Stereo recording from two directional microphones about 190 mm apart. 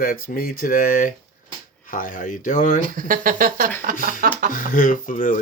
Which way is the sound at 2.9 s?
45° right (ahead or behind).